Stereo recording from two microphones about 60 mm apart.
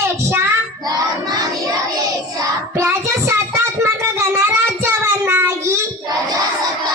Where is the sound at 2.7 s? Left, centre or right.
Right.